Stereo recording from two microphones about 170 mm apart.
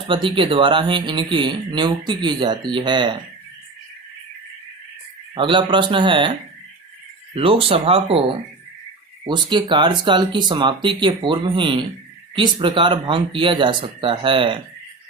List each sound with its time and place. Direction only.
0.1 s speech: 30° right (ahead or behind)
5.3 s speech: 30° right (ahead or behind)
7.3 s speech: 35° right (ahead or behind)